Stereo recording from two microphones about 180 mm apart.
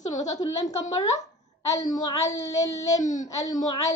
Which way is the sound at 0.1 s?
40° left (ahead or behind).